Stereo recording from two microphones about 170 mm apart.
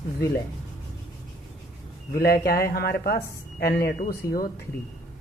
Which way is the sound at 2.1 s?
65° left (ahead or behind).